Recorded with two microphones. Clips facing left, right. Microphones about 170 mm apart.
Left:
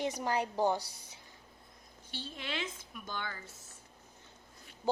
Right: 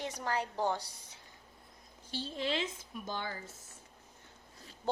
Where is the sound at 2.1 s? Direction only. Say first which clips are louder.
Right 6 dB; 35° right (ahead or behind).